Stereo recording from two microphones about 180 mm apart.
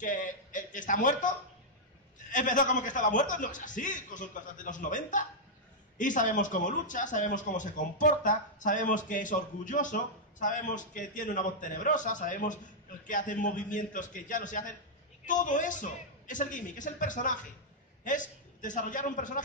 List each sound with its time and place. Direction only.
0.0 s speech: 45° left (ahead or behind)
2.3 s a man's voice: 45° left (ahead or behind)